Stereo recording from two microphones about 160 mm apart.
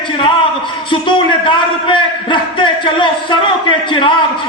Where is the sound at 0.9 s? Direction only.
30° left (ahead or behind).